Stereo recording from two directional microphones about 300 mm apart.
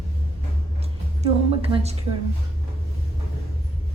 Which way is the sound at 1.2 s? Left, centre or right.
Centre.